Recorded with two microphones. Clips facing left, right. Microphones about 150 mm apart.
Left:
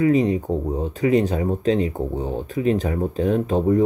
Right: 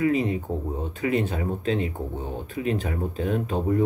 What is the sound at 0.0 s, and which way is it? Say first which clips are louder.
Speech: left 5 dB; 40° left (ahead or behind).